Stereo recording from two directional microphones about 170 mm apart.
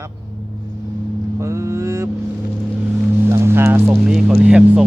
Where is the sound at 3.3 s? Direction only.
15° right (ahead or behind).